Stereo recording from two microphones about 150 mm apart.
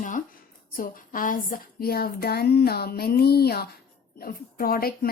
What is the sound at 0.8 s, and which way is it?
Speech, 65° left (ahead or behind).